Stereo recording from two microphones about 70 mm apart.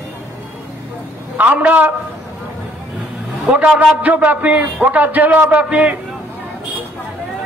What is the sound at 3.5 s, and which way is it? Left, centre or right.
A man's voice, centre.